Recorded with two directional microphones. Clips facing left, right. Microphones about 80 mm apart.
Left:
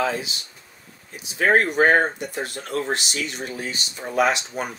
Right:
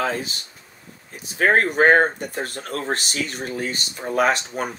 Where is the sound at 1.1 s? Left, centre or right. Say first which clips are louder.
Even; right.